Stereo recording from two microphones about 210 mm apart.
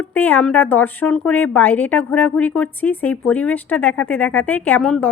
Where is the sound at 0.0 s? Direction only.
10° left (ahead or behind).